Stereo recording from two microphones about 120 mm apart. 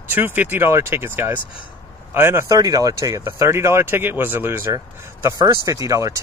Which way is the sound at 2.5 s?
30° right (ahead or behind).